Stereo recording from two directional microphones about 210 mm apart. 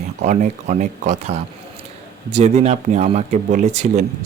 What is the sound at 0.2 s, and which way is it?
A man's voice, 35° right (ahead or behind).